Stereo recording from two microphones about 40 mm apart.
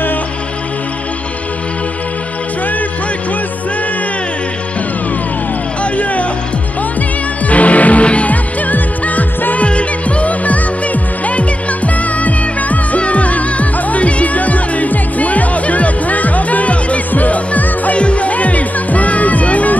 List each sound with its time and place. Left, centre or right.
7.4 s music: left
9.7 s music: left